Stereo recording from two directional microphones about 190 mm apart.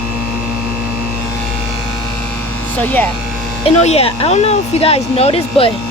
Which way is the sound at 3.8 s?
35° left (ahead or behind).